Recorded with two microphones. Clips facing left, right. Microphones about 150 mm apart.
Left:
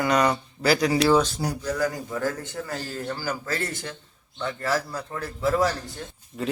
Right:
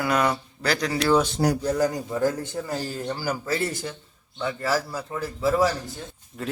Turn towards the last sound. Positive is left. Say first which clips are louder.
# left 2 dB
turn(degrees=0)  # may be behind; listen again after turning